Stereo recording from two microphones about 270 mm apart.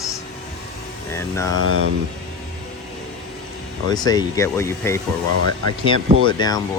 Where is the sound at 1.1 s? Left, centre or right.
Centre.